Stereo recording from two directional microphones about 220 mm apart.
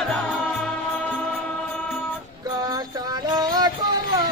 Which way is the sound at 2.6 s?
15° right (ahead or behind).